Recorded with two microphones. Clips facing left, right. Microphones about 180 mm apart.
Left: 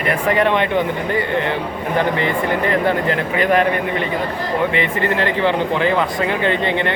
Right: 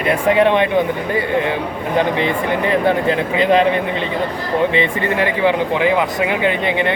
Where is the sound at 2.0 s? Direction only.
15° right (ahead or behind).